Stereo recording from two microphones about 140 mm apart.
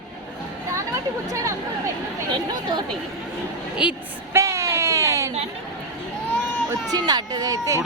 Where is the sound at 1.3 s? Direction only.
20° right (ahead or behind).